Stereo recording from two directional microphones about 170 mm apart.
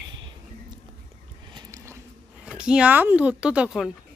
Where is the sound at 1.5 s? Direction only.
15° right (ahead or behind).